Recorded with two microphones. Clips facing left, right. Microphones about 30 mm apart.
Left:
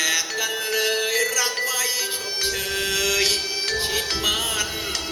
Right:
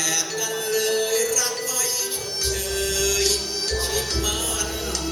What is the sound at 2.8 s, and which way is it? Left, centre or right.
Music, left.